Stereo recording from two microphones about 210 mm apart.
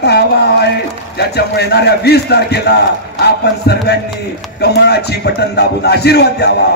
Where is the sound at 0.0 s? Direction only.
50° left (ahead or behind).